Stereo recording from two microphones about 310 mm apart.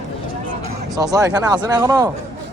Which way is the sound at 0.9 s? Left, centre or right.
Centre.